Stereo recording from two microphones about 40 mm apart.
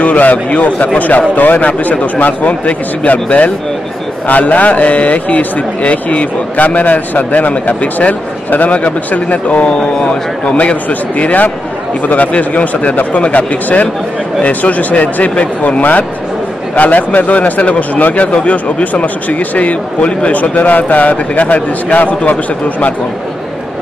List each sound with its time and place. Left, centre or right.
0.0 s a man's voice: left
7.8 s a man's voice: left
15.8 s a man's voice: left
20.3 s a man's voice: left